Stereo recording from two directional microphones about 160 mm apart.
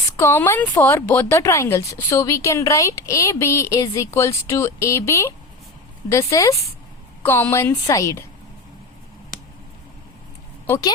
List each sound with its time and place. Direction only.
0.2 s speech: 15° left (ahead or behind)
10.7 s speech: 20° left (ahead or behind)